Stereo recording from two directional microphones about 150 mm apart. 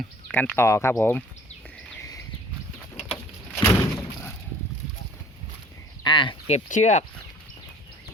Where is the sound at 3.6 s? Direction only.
15° left (ahead or behind).